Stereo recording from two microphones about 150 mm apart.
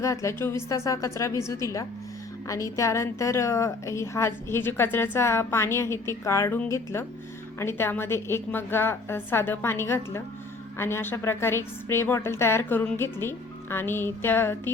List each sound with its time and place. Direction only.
0.0 s a woman's voice: 20° left (ahead or behind)